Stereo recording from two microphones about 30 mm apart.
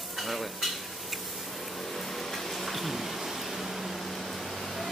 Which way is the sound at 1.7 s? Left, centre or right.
Centre.